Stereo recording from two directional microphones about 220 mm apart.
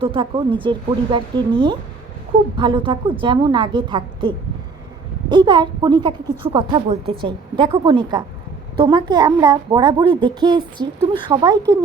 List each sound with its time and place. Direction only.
0.0 s a woman's voice: 25° right (ahead or behind)